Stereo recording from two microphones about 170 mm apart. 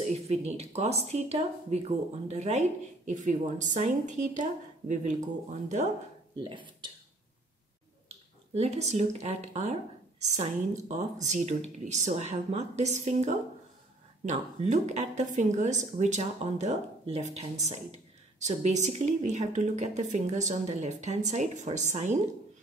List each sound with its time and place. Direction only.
0.0 s speech: 40° right (ahead or behind)
6.4 s speech: 30° right (ahead or behind)
8.5 s speech: 40° right (ahead or behind)